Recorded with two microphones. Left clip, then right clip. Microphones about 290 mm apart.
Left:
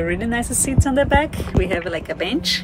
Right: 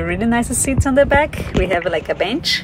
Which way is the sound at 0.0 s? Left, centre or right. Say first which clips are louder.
Right 3 dB; centre.